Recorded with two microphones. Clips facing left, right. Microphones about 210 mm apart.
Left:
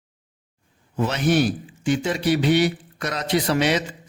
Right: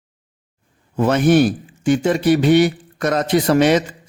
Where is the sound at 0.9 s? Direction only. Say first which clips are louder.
Right 7 dB; 50° right (ahead or behind).